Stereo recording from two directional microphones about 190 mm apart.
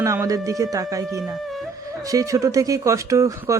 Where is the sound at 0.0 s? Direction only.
15° right (ahead or behind).